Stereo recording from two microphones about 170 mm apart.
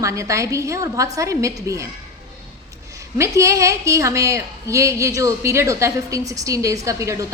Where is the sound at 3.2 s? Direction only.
15° right (ahead or behind).